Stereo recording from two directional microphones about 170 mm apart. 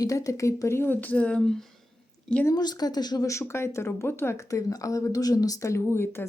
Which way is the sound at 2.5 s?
25° left (ahead or behind).